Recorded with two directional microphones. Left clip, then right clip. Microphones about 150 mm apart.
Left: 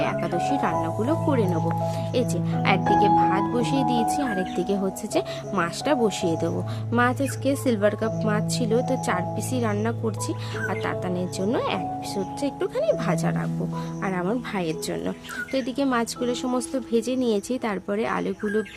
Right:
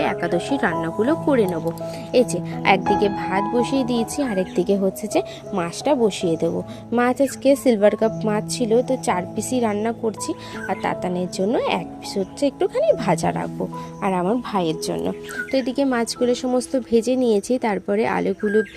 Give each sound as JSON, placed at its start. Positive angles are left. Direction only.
{"t": 0.0, "sound": "speech", "side_deg": -25}